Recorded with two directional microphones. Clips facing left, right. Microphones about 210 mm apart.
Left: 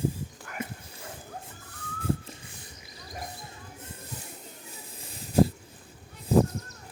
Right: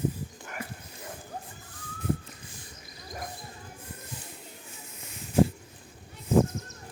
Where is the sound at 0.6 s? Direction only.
20° left (ahead or behind).